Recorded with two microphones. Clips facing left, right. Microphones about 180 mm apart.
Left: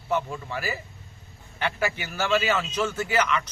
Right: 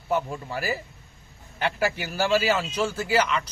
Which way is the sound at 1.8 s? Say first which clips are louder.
Right 4 dB; 35° right (ahead or behind).